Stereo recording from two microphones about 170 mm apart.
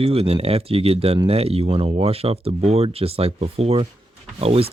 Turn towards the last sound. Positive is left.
turn(degrees=-35)  # may be behind; listen again after turning